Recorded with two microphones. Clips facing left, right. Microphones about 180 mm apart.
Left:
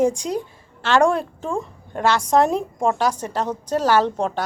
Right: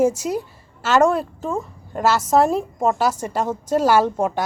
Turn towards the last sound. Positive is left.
turn(degrees=-10)  # may be behind; listen again after turning